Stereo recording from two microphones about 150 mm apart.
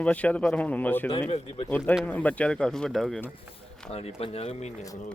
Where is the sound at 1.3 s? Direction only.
40° left (ahead or behind).